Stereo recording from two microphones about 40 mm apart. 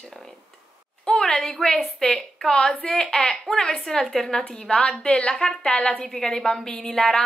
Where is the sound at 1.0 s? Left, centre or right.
Centre.